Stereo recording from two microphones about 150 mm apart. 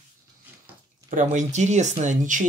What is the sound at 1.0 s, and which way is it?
Speech, 55° right (ahead or behind).